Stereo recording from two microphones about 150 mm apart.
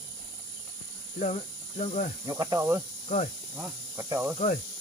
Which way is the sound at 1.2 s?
50° left (ahead or behind).